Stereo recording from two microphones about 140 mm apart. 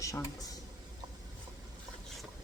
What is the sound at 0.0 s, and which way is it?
Speech, 25° left (ahead or behind).